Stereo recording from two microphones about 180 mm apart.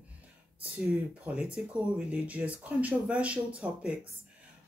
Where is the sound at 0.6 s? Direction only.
10° right (ahead or behind).